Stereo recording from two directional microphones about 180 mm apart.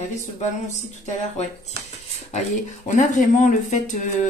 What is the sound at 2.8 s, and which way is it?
Speech, 45° left (ahead or behind).